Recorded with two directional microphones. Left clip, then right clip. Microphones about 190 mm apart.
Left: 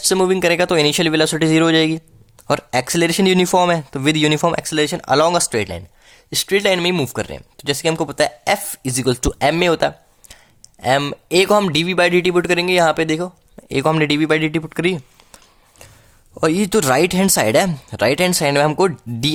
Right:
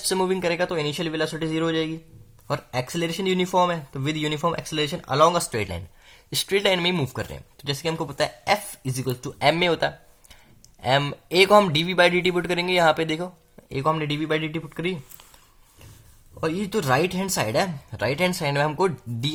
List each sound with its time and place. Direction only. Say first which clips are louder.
0.0 s speech: left 8 dB; 35° left (ahead or behind); by 9.3 s 50° left (ahead or behind)
9.4 s speech: left 4 dB; 35° left (ahead or behind)
13.7 s speech: left 8 dB; 50° left (ahead or behind)
16.4 s speech: left 10 dB; 50° left (ahead or behind)